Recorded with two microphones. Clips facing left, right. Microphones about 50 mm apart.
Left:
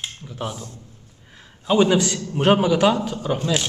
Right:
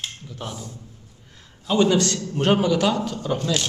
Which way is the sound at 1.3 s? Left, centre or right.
Centre.